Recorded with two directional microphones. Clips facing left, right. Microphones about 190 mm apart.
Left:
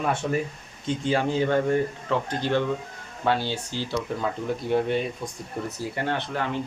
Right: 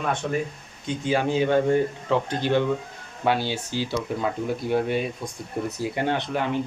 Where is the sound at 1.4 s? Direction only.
20° right (ahead or behind).